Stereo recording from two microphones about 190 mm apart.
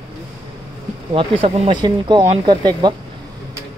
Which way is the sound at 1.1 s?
30° right (ahead or behind).